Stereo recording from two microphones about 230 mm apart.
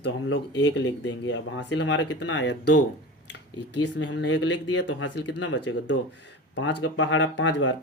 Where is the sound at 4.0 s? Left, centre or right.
Left.